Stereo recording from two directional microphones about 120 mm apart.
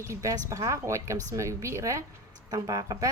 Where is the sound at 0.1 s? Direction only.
25° right (ahead or behind).